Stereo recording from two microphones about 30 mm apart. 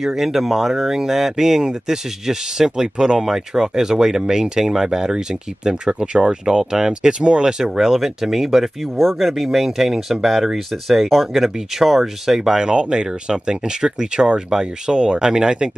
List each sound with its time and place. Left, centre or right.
0.0 s speech: centre
7.8 s speech: centre
8.9 s speech: centre
9.3 s speech: centre
11.3 s speech: centre
12.7 s speech: right